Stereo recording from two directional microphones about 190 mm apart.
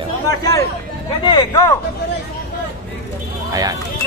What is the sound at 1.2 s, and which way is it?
Speech, 20° left (ahead or behind).